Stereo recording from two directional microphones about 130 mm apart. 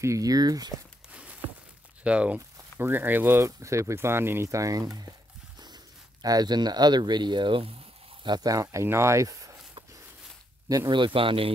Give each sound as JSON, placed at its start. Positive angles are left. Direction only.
{"t": 0.0, "sound": "speech", "side_deg": -25}
{"t": 1.1, "sound": "a sound", "side_deg": -10}
{"t": 2.0, "sound": "speech", "side_deg": -10}
{"t": 6.2, "sound": "speech", "side_deg": -30}
{"t": 10.9, "sound": "speech", "side_deg": -40}